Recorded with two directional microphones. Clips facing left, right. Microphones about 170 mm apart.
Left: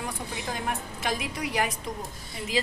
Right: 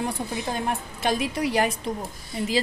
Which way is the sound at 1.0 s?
30° right (ahead or behind).